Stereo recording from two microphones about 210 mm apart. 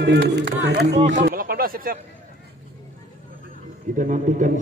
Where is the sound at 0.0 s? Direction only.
50° right (ahead or behind).